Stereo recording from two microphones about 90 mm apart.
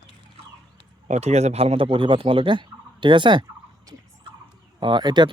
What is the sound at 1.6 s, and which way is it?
Speech, 85° right.